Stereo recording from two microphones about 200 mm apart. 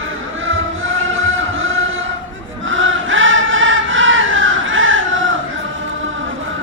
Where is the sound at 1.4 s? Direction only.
75° right (ahead or behind).